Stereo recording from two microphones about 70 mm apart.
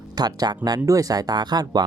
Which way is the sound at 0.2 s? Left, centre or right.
Right.